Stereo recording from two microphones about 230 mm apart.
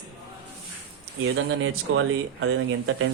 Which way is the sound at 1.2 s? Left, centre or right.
Right.